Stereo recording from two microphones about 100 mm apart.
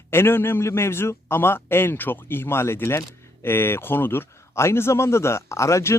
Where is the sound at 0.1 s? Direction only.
25° left (ahead or behind).